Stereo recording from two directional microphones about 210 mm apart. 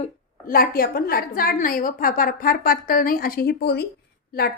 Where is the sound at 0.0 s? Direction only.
45° left (ahead or behind).